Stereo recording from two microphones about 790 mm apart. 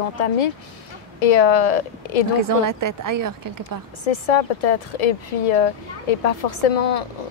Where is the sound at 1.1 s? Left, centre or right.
Left.